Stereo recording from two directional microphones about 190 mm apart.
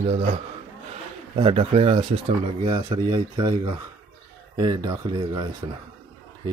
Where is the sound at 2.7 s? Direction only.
20° right (ahead or behind).